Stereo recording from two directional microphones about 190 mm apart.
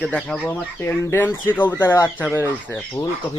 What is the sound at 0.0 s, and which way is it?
Speech, 5° left (ahead or behind).